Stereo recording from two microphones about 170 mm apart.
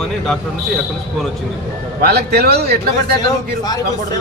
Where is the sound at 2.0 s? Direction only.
65° right (ahead or behind).